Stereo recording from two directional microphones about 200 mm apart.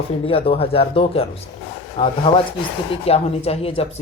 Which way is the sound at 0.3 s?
30° left (ahead or behind).